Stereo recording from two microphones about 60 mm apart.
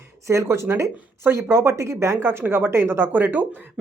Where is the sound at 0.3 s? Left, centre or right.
Right.